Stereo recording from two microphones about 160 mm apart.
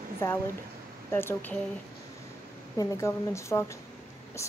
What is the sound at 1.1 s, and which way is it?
Speech, 15° left (ahead or behind).